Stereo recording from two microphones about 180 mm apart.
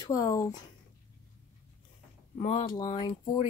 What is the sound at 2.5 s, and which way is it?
Speech, 20° left (ahead or behind).